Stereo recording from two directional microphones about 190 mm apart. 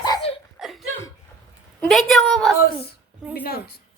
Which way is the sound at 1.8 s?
Centre (ahead or behind).